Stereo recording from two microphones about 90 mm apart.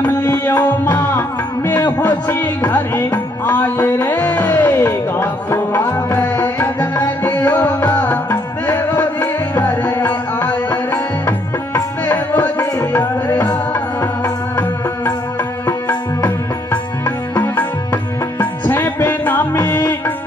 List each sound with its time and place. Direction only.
0.0 s tabla: 25° left (ahead or behind)
1.7 s music: 25° left (ahead or behind)
15.6 s music: 25° left (ahead or behind)
18.4 s music: 25° left (ahead or behind)